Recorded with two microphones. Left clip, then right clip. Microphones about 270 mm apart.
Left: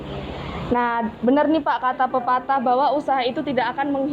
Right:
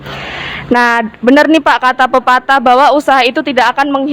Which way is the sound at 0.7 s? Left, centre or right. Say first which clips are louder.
Right 11 dB; right.